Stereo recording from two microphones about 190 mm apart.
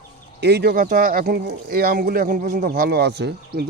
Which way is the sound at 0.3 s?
60° right (ahead or behind).